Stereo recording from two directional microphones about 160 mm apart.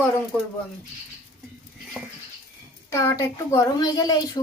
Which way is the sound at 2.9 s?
15° left (ahead or behind).